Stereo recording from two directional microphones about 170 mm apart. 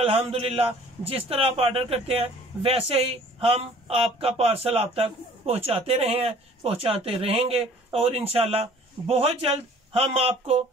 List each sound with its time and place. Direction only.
0.0 s speech: 35° right (ahead or behind)